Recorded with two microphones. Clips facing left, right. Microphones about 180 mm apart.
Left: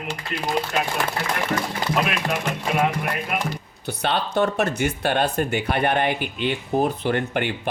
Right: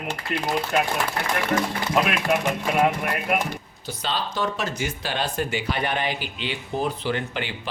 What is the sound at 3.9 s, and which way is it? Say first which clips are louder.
Speech: left 4 dB; 60° left (ahead or behind).